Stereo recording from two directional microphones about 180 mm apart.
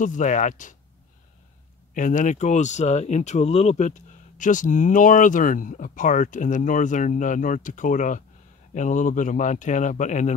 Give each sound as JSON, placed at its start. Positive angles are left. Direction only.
{"t": 0.0, "sound": "speech", "side_deg": 45}
{"t": 2.0, "sound": "speech", "side_deg": 45}